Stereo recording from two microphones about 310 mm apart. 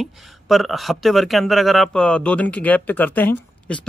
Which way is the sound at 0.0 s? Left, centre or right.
Centre.